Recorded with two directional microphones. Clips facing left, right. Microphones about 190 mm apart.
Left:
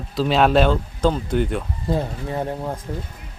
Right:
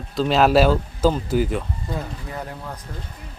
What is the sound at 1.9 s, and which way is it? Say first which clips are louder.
Speech: left 8 dB; 30° left (ahead or behind).